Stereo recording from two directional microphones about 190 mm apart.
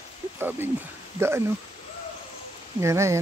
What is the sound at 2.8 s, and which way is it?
Speech, 15° right (ahead or behind).